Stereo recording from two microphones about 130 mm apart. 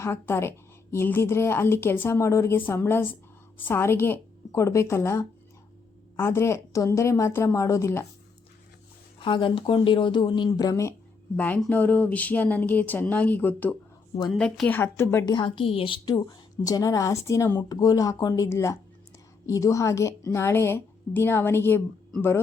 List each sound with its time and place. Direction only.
0.0 s a woman's voice: 20° left (ahead or behind)
9.1 s speech: 40° left (ahead or behind)
11.3 s speech: 15° left (ahead or behind)
14.3 s a woman's voice: 5° left (ahead or behind)
14.7 s speech: 20° left (ahead or behind)
15.3 s a woman's voice: 40° left (ahead or behind); by 21.8 s 15° left (ahead or behind)